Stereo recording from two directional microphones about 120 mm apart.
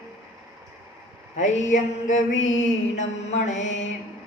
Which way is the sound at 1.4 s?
90° left.